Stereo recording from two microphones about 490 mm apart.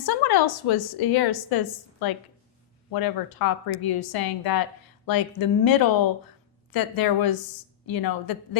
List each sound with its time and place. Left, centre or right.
0.0 s a woman's voice: left
2.9 s a woman's voice: left